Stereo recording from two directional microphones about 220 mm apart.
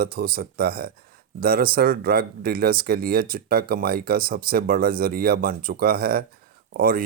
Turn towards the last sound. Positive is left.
turn(degrees=-40)  # may be behind; listen again after turning